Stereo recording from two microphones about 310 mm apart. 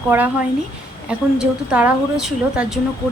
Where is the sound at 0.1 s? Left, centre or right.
Centre.